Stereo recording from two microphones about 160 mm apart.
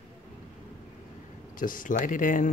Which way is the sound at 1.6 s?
60° left (ahead or behind).